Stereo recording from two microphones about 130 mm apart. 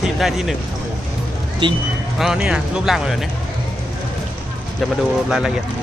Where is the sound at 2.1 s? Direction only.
5° right (ahead or behind).